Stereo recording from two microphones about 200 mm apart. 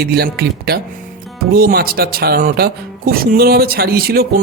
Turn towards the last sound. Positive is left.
turn(degrees=-50)  # may be behind; listen again after turning